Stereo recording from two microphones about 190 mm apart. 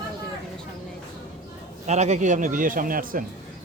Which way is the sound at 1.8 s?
35° right (ahead or behind).